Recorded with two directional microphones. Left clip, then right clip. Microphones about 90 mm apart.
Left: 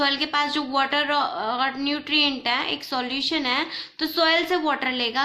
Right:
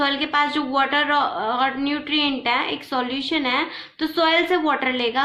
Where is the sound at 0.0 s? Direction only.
35° left (ahead or behind).